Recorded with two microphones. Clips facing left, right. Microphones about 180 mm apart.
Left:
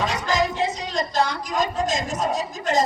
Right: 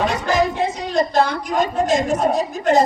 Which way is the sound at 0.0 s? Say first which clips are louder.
Right 4 dB; 60° right (ahead or behind).